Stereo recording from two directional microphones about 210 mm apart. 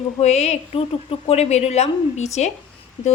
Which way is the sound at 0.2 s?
30° left (ahead or behind).